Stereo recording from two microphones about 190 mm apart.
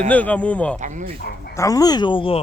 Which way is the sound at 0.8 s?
40° right (ahead or behind).